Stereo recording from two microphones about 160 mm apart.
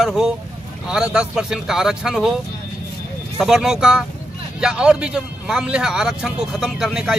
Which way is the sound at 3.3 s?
5° right (ahead or behind).